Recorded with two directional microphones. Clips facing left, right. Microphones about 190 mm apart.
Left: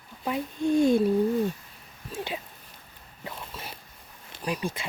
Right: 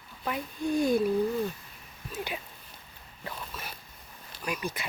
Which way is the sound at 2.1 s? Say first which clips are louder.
Left 2 dB; 30° left (ahead or behind).